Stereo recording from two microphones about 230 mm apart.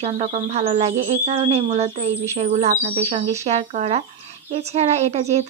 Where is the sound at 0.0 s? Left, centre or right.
Right.